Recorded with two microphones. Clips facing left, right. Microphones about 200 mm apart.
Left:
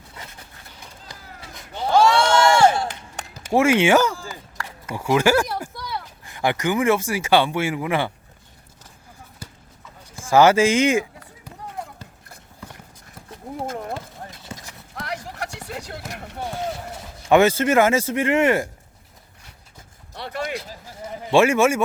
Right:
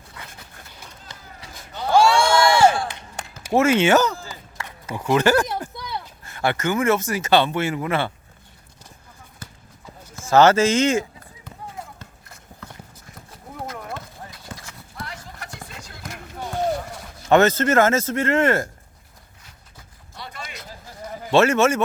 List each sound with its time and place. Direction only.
1.9 s a sound: 10° right (ahead or behind)
3.5 s speech: 15° left (ahead or behind)
10.2 s speech: 10° left (ahead or behind)
14.4 s clip-clop: 20° left (ahead or behind)
15.0 s run: 75° left (ahead or behind)
17.2 s speech: 10° left (ahead or behind)
20.1 s a sound: 65° left (ahead or behind)
20.7 s bleat: 10° left (ahead or behind)